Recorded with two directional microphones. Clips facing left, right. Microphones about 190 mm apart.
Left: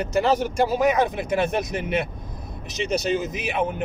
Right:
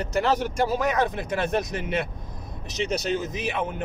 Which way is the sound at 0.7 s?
15° left (ahead or behind).